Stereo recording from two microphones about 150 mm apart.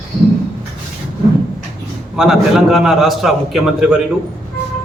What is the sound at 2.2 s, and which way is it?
A man's voice, centre (ahead or behind).